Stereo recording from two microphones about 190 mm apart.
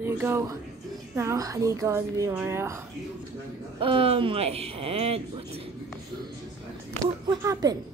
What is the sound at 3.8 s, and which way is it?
Speech, 30° right (ahead or behind).